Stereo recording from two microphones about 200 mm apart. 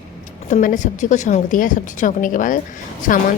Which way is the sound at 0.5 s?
40° left (ahead or behind).